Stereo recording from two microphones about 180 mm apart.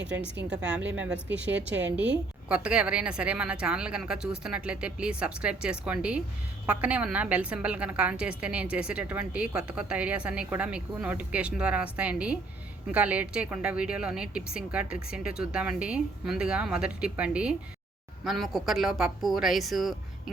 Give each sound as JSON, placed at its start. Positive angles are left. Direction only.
{"t": 0.4, "sound": "a woman's voice", "side_deg": -5}
{"t": 1.5, "sound": "a woman's voice", "side_deg": -85}
{"t": 2.5, "sound": "a woman's voice", "side_deg": -5}